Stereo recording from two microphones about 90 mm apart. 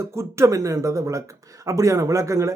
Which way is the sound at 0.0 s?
30° right (ahead or behind).